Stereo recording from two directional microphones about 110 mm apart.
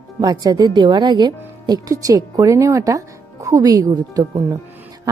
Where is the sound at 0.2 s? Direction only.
40° right (ahead or behind).